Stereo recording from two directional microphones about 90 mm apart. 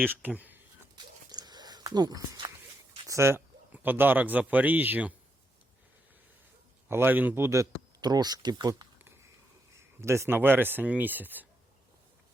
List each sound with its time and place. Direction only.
0.2 s speech: 20° right (ahead or behind)
1.3 s a sound: 50° right (ahead or behind)
3.1 s speech: 30° right (ahead or behind)
6.8 s speech: 25° right (ahead or behind)
8.0 s speech: 45° right (ahead or behind)
9.7 s speech: 30° right (ahead or behind)